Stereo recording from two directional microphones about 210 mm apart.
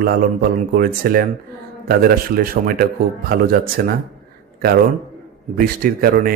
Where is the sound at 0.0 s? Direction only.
45° right (ahead or behind).